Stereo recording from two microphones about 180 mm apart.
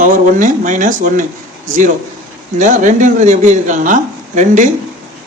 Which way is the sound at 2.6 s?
45° right (ahead or behind).